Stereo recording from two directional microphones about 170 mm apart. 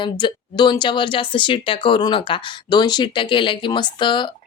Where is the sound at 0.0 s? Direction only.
25° left (ahead or behind).